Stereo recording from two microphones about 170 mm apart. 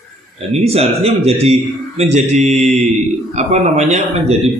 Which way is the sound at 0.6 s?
35° right (ahead or behind).